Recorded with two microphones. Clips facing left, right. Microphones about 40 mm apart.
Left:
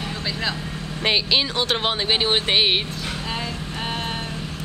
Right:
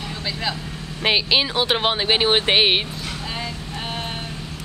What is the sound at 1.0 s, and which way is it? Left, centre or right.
Speech, centre.